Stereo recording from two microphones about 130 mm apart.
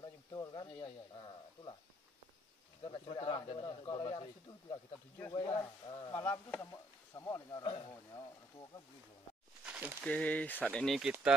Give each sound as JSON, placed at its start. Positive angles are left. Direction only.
{"t": 0.0, "sound": "a sound", "side_deg": 30}
{"t": 2.8, "sound": "speech", "side_deg": 35}
{"t": 6.1, "sound": "speech", "side_deg": 20}
{"t": 7.6, "sound": "speech", "side_deg": 40}
{"t": 9.7, "sound": "a sound", "side_deg": -10}
{"t": 10.0, "sound": "speech", "side_deg": 10}
{"t": 11.0, "sound": "speech", "side_deg": -5}